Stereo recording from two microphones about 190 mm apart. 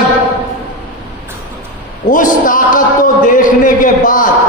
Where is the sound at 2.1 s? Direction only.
45° left (ahead or behind).